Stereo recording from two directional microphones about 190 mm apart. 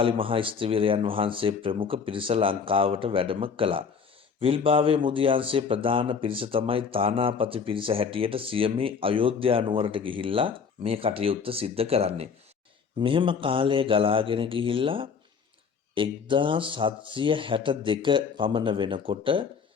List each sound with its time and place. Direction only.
0.0 s speech: 30° right (ahead or behind)